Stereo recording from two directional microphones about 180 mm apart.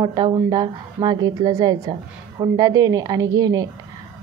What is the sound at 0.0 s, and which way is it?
A woman's voice, 25° right (ahead or behind).